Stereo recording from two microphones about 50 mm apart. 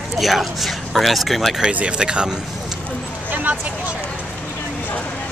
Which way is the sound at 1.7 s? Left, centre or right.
Right.